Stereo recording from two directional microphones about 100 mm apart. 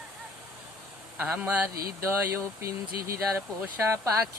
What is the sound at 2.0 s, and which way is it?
Speech, 30° right (ahead or behind).